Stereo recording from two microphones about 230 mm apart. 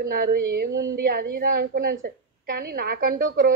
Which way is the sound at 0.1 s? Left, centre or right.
Right.